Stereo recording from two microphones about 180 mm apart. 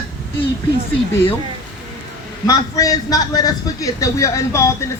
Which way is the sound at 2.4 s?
20° left (ahead or behind).